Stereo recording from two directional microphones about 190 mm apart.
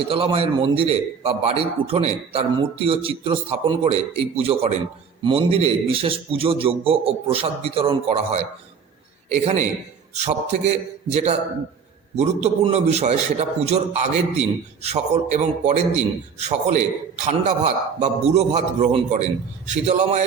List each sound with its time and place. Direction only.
0.1 s a man's voice: 30° right (ahead or behind)